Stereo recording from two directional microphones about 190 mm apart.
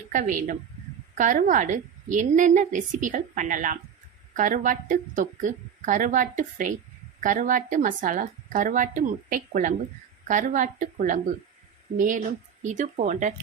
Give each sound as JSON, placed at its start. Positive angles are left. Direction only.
{"t": 0.1, "sound": "a woman's voice", "side_deg": -45}